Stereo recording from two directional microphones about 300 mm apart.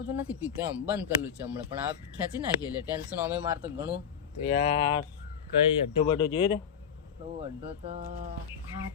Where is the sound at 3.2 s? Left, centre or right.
Centre.